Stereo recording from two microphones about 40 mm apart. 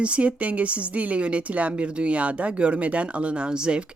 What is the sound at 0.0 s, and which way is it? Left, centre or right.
Speech, right.